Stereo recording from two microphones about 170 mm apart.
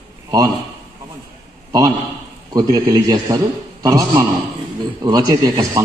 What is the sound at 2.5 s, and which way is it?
A man's voice, 20° right (ahead or behind).